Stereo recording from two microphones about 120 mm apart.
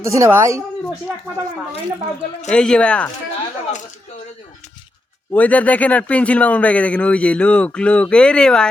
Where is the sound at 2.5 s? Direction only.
5° left (ahead or behind).